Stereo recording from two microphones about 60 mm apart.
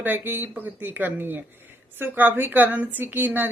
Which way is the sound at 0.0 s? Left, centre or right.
Right.